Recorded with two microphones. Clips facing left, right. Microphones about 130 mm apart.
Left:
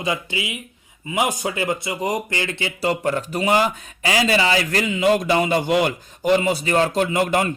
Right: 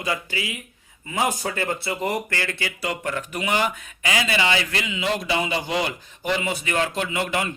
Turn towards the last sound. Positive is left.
turn(degrees=45)  # may be behind; listen again after turning